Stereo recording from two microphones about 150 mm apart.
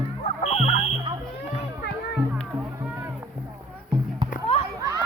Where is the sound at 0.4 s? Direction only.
45° left (ahead or behind).